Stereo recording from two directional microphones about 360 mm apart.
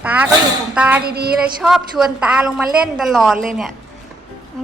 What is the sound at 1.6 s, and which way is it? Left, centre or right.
A woman's voice, centre.